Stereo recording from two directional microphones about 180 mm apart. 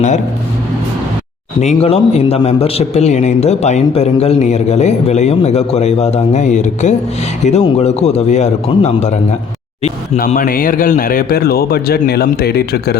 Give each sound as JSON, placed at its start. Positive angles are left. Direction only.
{"t": 1.6, "sound": "a man's voice", "side_deg": 35}
{"t": 10.2, "sound": "a man's voice", "side_deg": 50}